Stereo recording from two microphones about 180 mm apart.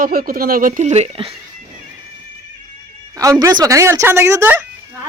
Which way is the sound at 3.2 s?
20° right (ahead or behind).